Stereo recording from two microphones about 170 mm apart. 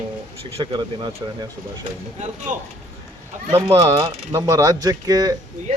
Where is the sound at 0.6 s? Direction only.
25° right (ahead or behind).